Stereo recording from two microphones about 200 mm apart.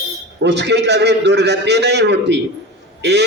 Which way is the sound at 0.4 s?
60° right (ahead or behind).